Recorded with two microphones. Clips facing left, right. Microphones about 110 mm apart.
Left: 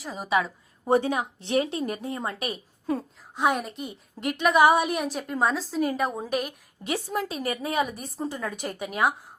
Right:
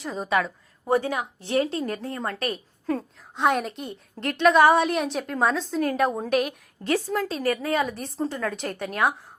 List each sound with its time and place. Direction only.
0.0 s a woman's voice: 5° left (ahead or behind)
0.9 s a woman's voice: 20° left (ahead or behind); by 6.6 s centre (ahead or behind)
6.8 s a woman's voice: 15° left (ahead or behind)